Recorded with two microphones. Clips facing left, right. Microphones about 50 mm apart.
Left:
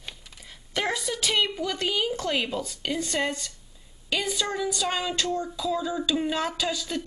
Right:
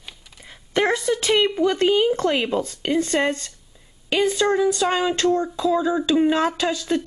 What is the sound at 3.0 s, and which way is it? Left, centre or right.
A woman's voice, right.